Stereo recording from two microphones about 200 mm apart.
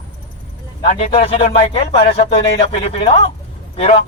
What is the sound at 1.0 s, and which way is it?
A man's voice, 30° left (ahead or behind).